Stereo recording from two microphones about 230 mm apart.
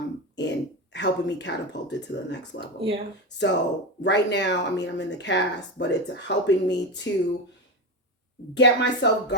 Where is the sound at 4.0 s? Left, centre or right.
Left.